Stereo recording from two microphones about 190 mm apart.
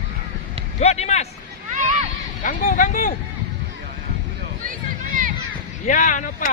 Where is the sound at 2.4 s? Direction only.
40° left (ahead or behind).